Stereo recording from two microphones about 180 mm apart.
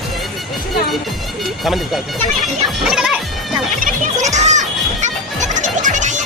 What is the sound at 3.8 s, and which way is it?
Children playing, 40° right (ahead or behind).